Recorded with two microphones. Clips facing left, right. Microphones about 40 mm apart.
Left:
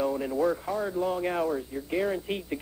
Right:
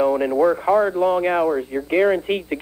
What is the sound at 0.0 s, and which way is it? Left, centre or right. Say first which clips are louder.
Radio: right 10 dB; right.